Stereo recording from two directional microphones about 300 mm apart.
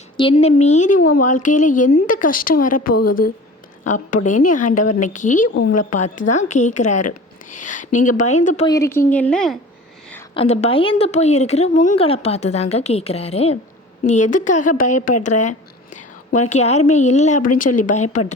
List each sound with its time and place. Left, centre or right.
0.2 s speech: centre
10.3 s speech: left
14.9 s speech: left
15.2 s a woman's voice: left